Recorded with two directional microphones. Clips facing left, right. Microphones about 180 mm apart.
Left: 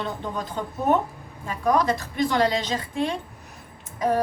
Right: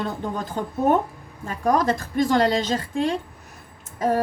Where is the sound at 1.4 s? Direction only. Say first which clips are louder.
Right 1 dB; 45° right (ahead or behind).